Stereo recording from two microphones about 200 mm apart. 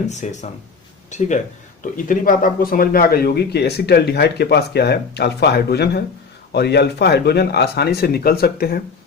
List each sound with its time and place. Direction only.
0.1 s a man's voice: 35° left (ahead or behind)